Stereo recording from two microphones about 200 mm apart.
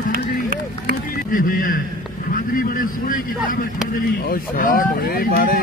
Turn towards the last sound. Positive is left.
turn(degrees=45)  # may be behind; listen again after turning